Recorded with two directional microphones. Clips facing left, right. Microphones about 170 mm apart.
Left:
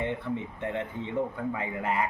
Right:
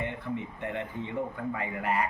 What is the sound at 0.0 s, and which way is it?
A man's voice, 20° left (ahead or behind).